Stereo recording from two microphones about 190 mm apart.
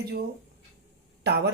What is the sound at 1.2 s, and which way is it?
Speech, 60° right (ahead or behind).